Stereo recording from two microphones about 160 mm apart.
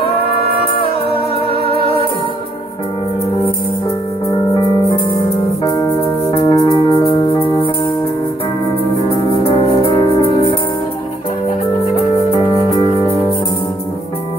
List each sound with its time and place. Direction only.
1.5 s music: 35° left (ahead or behind)
6.4 s music: 25° left (ahead or behind)
9.4 s music: 35° left (ahead or behind)
12.4 s music: 30° left (ahead or behind)